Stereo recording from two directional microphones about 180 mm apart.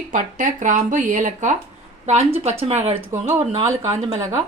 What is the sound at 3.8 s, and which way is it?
Speech, 15° right (ahead or behind).